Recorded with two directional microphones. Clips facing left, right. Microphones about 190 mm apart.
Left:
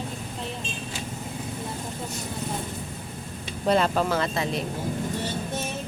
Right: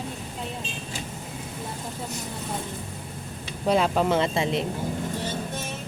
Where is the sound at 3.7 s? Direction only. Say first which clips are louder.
Right 1 dB; 10° right (ahead or behind).